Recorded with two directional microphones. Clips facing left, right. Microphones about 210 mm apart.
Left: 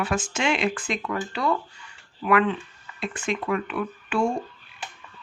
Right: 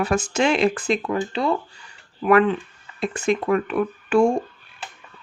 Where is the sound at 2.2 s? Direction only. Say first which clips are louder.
Right 5 dB; 40° right (ahead or behind).